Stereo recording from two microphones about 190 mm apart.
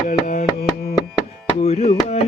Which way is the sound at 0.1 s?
45° left (ahead or behind).